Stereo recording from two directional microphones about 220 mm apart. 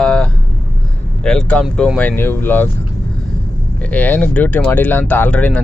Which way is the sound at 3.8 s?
5° left (ahead or behind).